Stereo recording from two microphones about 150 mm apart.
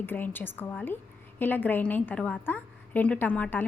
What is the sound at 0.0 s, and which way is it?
A woman's voice, 15° left (ahead or behind).